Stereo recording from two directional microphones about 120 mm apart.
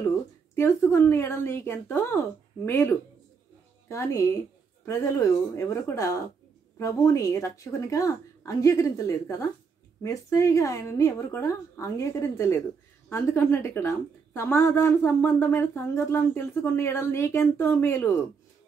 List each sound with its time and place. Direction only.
0.6 s a woman's voice: 20° left (ahead or behind)